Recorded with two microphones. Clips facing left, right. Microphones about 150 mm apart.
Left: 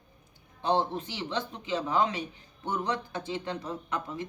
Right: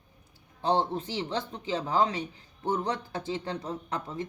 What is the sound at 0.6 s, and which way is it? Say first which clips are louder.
Speech: right 1 dB; 30° right (ahead or behind).